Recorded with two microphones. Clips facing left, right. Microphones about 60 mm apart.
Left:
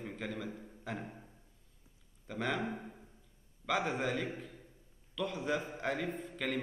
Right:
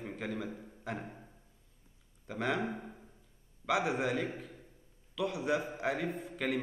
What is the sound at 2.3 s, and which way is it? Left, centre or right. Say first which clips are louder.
A man's voice: right 2 dB; centre.